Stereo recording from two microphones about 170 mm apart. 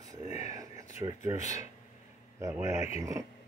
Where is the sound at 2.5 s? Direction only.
15° right (ahead or behind).